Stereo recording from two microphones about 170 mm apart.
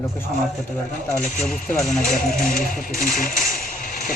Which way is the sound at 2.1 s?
55° left (ahead or behind).